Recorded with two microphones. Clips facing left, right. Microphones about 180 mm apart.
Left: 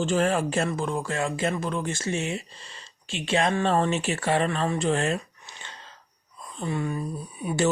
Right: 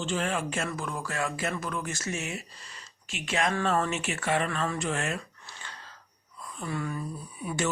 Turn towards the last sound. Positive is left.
turn(degrees=25)  # may be behind; listen again after turning